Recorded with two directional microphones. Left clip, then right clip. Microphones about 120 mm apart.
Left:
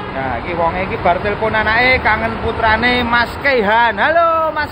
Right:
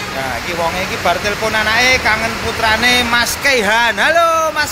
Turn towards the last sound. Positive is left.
turn(degrees=-45)  # may be behind; listen again after turning